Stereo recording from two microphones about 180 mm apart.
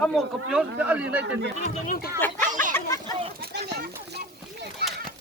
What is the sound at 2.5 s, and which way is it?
Chatter, 45° right (ahead or behind).